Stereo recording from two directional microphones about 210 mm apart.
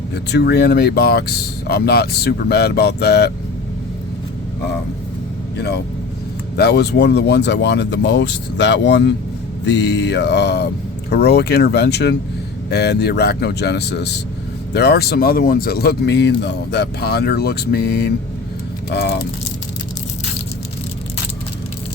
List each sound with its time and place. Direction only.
0.1 s speech: 55° left (ahead or behind)
5.5 s speech: 50° left (ahead or behind)